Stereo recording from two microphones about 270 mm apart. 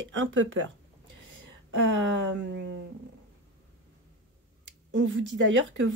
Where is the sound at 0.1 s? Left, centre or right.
Right.